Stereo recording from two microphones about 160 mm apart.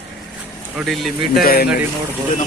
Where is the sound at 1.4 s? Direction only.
70° left (ahead or behind).